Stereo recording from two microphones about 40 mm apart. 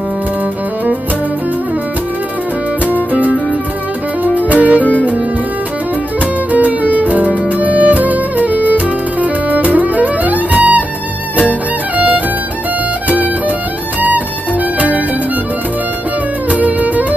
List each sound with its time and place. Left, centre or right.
2.9 s music: right
4.7 s music: left
6.5 s music: right
16.4 s music: right